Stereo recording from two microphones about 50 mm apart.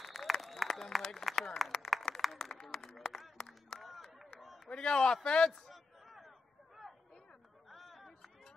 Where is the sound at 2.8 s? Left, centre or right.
Centre.